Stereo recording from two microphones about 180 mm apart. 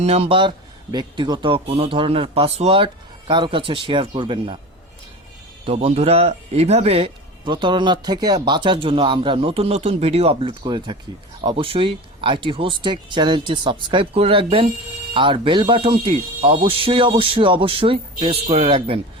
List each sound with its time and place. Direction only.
0.0 s speech: 35° right (ahead or behind)
5.6 s speech: 35° right (ahead or behind)